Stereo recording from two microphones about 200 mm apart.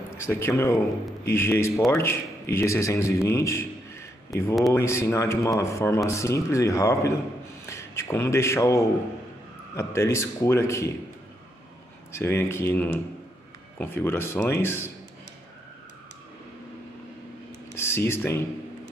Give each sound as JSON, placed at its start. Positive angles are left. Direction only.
{"t": 0.3, "sound": "a man's voice", "side_deg": 10}
{"t": 12.2, "sound": "speech", "side_deg": 10}
{"t": 17.7, "sound": "speech", "side_deg": 10}